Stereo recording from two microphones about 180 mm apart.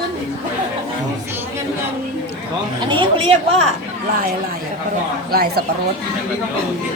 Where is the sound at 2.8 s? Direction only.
25° right (ahead or behind).